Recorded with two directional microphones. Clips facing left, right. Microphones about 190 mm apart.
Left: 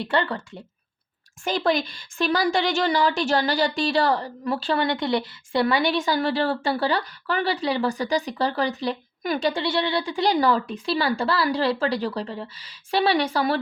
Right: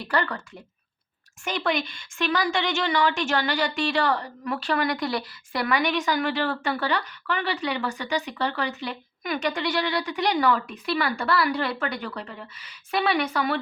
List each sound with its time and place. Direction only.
0.0 s a woman's voice: 25° left (ahead or behind)